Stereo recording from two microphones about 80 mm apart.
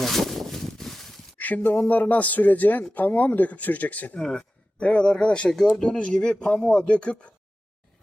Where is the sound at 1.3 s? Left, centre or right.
Centre.